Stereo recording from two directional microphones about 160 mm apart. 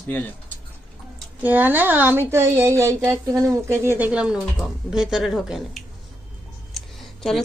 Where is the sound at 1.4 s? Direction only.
10° right (ahead or behind).